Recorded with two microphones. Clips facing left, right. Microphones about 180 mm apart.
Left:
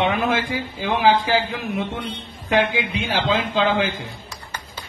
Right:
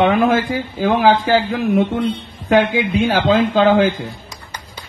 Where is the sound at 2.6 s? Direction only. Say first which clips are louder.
Right 5 dB; 45° right (ahead or behind).